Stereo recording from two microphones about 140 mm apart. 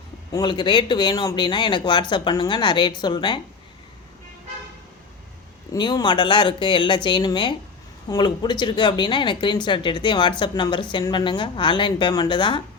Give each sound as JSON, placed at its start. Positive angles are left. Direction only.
{"t": 0.3, "sound": "speech", "side_deg": 30}
{"t": 5.7, "sound": "speech", "side_deg": 30}